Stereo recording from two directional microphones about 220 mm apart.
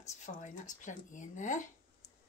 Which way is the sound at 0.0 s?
35° left (ahead or behind).